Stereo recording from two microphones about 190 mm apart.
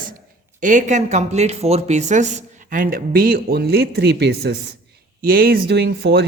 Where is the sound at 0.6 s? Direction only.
40° right (ahead or behind).